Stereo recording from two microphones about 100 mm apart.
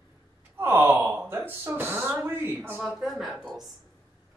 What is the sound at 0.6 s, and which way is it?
Speech, 25° right (ahead or behind).